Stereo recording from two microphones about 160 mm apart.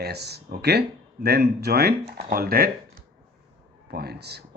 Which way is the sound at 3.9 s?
80° right.